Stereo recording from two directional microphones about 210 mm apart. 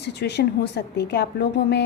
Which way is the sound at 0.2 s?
55° left (ahead or behind).